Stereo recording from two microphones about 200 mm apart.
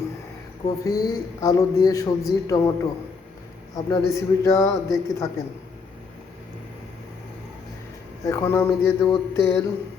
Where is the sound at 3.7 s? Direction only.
15° left (ahead or behind).